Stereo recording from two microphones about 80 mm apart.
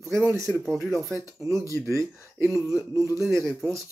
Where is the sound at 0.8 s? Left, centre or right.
Right.